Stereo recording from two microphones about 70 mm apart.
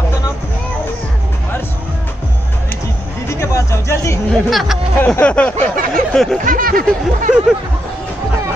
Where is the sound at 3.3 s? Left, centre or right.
Left.